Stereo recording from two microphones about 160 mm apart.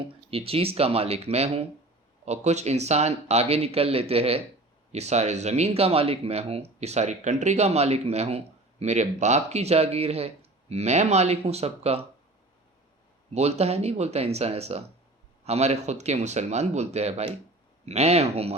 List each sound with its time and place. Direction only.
0.0 s speech: 35° right (ahead or behind)
13.3 s speech: 40° right (ahead or behind)